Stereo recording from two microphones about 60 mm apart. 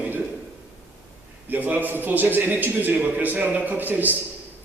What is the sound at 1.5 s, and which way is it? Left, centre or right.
A man's voice, right.